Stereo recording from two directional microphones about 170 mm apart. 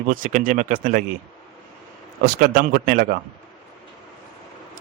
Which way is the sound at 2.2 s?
60° right (ahead or behind).